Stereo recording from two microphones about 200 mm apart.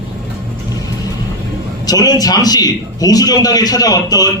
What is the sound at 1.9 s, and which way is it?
A man's voice, 20° left (ahead or behind).